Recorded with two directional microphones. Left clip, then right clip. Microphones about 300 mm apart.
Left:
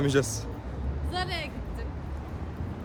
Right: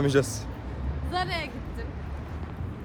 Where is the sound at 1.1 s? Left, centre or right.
Centre.